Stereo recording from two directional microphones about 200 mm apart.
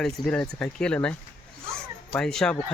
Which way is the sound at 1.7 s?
5° left (ahead or behind).